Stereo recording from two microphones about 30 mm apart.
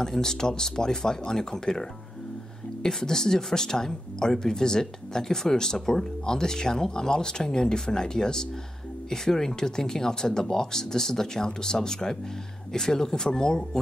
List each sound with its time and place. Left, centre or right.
0.2 s speech: left